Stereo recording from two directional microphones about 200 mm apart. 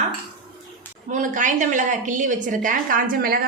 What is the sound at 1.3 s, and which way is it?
A woman's voice, 40° right (ahead or behind).